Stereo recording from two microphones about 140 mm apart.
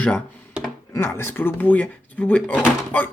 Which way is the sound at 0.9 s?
20° left (ahead or behind).